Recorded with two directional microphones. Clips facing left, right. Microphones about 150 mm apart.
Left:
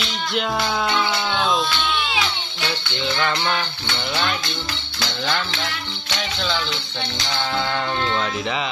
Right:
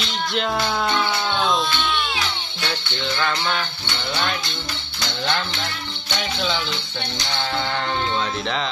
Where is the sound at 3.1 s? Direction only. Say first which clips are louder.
Left 1 dB; 15° left (ahead or behind).